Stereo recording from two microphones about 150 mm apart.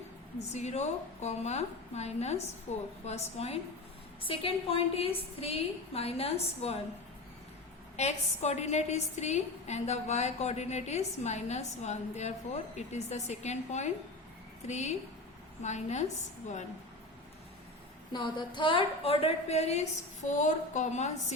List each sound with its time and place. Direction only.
0.3 s a woman's voice: 50° left (ahead or behind)
7.9 s a woman's voice: 50° left (ahead or behind)
18.1 s a woman's voice: 30° left (ahead or behind); by 21.3 s 50° left (ahead or behind)